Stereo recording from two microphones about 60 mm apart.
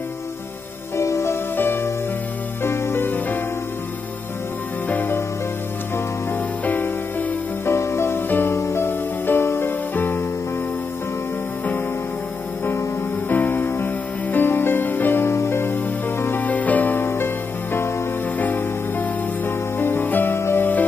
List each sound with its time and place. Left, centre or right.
0.9 s music: left
4.8 s music: left
6.6 s music: left
7.6 s music: left
13.3 s music: left
16.4 s music: left
18.4 s music: left